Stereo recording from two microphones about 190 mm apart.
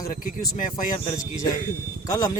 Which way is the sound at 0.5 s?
40° left (ahead or behind).